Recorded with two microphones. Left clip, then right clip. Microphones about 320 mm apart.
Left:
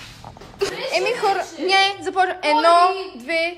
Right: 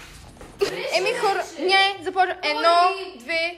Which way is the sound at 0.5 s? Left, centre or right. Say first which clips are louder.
Left 1 dB; centre.